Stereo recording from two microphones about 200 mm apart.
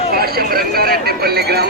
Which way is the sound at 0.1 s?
50° right (ahead or behind).